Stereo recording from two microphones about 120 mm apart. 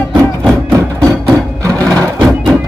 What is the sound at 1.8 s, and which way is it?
Music, 10° left (ahead or behind).